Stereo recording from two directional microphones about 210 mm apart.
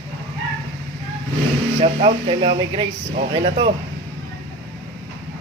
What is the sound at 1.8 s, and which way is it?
Speech, 25° right (ahead or behind).